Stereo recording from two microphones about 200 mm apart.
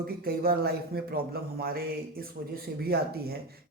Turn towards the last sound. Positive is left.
turn(degrees=-50)  # may be behind; listen again after turning